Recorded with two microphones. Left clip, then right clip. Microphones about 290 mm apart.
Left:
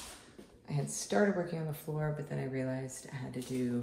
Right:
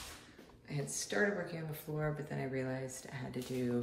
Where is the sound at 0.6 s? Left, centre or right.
Centre.